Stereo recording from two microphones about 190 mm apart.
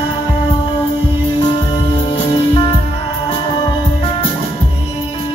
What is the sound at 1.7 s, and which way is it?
Music, 25° left (ahead or behind).